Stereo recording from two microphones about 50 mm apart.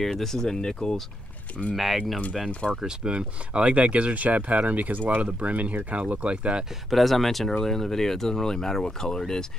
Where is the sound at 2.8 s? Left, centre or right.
Centre.